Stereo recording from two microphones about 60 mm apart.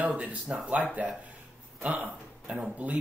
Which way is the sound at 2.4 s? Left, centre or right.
Centre.